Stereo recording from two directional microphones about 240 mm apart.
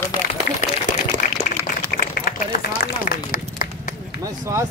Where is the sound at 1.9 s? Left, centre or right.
Left.